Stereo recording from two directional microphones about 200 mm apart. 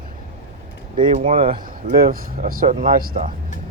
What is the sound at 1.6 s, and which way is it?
Speech, 45° right (ahead or behind).